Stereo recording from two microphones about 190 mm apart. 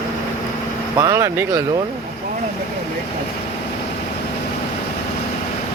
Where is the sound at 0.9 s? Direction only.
15° right (ahead or behind).